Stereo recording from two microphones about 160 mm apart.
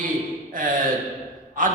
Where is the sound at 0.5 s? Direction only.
55° right (ahead or behind).